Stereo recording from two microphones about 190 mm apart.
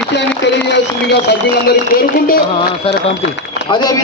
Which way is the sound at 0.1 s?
65° left (ahead or behind).